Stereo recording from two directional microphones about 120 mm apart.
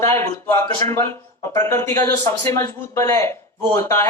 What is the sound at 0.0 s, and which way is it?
Speech, 20° left (ahead or behind).